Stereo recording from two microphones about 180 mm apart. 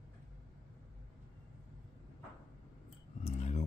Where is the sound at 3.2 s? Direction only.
40° left (ahead or behind).